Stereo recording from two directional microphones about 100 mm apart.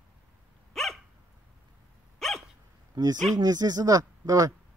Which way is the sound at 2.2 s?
Centre (ahead or behind).